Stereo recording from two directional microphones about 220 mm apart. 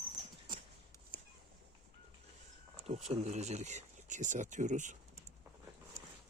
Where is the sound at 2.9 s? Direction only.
30° right (ahead or behind).